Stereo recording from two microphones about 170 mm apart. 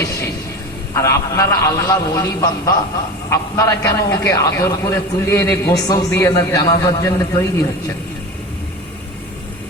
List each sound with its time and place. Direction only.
0.9 s a man's voice: 15° left (ahead or behind)